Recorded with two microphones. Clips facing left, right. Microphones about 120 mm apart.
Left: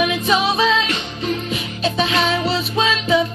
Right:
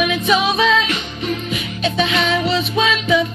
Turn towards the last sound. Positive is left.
turn(degrees=30)  # may be behind; listen again after turning